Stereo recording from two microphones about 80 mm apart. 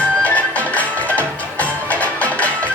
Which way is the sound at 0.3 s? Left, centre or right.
Centre.